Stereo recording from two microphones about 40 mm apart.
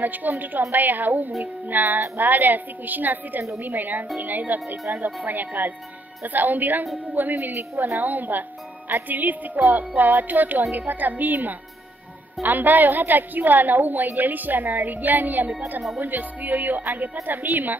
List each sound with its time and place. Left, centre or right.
0.0 s a woman's voice: right